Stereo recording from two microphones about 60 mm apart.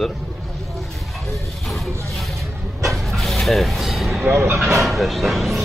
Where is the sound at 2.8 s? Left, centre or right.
Centre.